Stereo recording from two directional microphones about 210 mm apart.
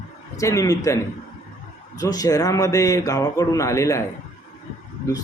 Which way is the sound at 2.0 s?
15° left (ahead or behind).